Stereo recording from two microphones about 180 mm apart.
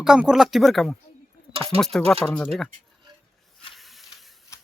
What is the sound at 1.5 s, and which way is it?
Speech, 30° right (ahead or behind).